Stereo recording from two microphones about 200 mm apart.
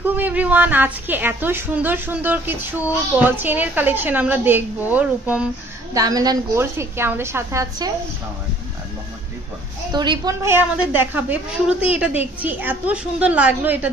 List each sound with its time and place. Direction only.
0.0 s a woman's voice: 10° right (ahead or behind)
5.9 s a woman's voice: 20° right (ahead or behind)
9.9 s a woman's voice: 20° right (ahead or behind)